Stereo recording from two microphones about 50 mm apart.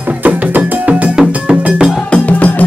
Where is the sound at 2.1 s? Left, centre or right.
Left.